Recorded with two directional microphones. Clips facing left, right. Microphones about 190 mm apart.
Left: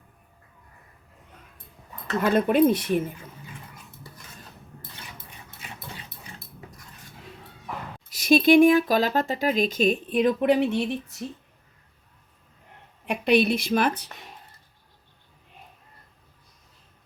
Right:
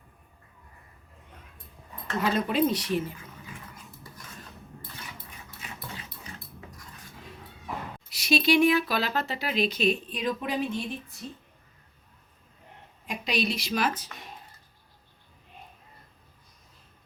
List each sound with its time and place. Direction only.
2.2 s speech: 55° left (ahead or behind)
8.1 s speech: 50° left (ahead or behind); by 10.8 s 70° left (ahead or behind)
13.1 s a woman's voice: 60° left (ahead or behind)